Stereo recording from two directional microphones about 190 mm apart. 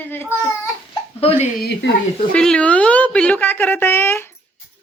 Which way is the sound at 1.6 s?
60° left (ahead or behind).